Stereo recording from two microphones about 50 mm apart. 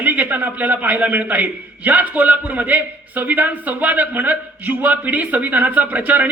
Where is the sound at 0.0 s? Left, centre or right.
Right.